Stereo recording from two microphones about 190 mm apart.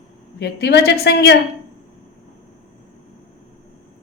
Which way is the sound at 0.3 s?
60° left (ahead or behind).